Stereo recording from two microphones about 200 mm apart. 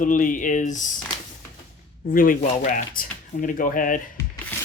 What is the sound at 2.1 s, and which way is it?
Speech, 45° left (ahead or behind).